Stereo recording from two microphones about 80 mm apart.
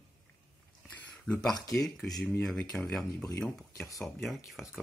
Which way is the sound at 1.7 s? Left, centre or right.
Centre.